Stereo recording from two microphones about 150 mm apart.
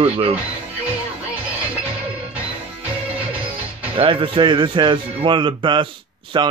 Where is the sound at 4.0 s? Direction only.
35° right (ahead or behind).